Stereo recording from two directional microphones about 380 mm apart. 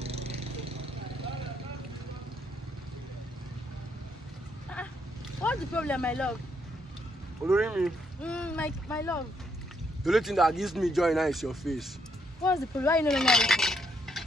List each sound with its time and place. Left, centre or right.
0.0 s vehicle: centre
5.4 s speech: centre
7.4 s speech: centre